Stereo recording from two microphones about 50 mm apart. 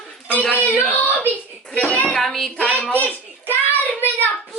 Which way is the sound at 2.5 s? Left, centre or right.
Left.